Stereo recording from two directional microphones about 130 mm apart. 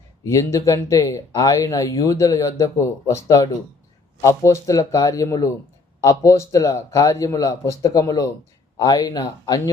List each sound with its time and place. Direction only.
0.3 s speech: 25° left (ahead or behind)